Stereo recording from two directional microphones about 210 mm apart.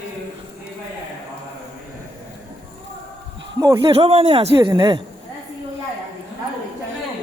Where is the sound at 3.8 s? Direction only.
25° right (ahead or behind).